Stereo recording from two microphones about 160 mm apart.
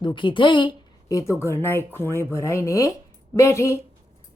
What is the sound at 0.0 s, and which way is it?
A woman's voice, 30° left (ahead or behind).